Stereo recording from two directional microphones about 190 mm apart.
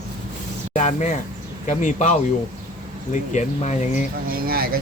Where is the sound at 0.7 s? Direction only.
40° left (ahead or behind).